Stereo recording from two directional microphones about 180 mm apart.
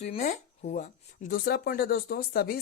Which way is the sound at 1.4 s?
60° left (ahead or behind).